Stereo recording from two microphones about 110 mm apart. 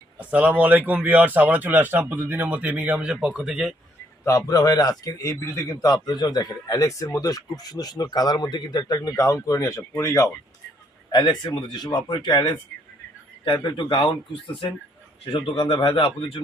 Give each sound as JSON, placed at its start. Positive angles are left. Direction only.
{"t": 0.2, "sound": "speech", "side_deg": -10}
{"t": 4.2, "sound": "speech", "side_deg": 30}
{"t": 11.1, "sound": "speech", "side_deg": 40}
{"t": 13.4, "sound": "speech", "side_deg": 50}
{"t": 15.2, "sound": "speech", "side_deg": 55}